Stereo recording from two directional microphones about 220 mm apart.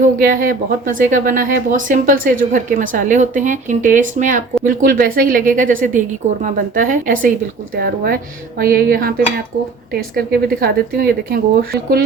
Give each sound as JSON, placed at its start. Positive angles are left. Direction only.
{"t": 0.0, "sound": "speech", "side_deg": -40}